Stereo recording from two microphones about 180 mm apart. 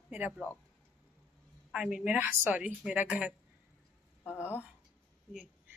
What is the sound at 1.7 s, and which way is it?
A woman's voice, 5° right (ahead or behind).